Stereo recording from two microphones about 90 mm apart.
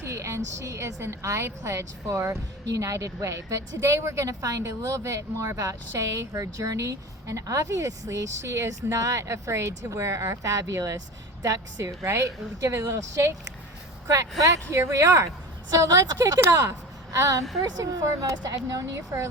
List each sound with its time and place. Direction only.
0.0 s a woman's voice: 30° right (ahead or behind)